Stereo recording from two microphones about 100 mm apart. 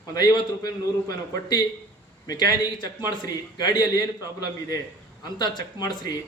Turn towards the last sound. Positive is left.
turn(degrees=45)  # may be behind; listen again after turning